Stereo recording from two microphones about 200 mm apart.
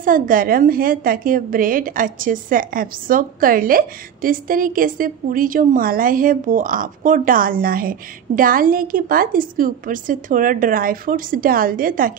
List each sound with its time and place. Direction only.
0.0 s a woman's voice: 45° right (ahead or behind)